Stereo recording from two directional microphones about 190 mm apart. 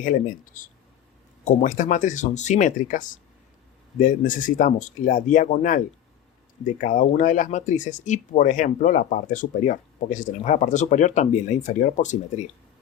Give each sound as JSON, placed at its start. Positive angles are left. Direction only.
{"t": 0.0, "sound": "speech", "side_deg": 45}